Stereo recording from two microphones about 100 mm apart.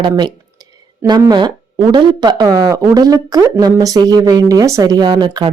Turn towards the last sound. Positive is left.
turn(degrees=-50)  # may be behind; listen again after turning